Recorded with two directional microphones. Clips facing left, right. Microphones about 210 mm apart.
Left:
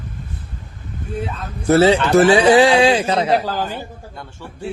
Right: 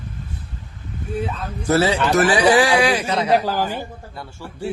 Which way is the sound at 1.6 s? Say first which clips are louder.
Left 5 dB; 25° left (ahead or behind).